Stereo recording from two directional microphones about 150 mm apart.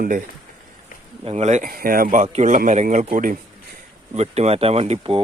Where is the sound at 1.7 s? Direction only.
75° right (ahead or behind).